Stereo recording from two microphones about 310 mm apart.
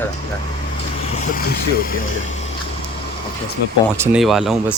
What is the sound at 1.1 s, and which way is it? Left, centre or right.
Speech, left.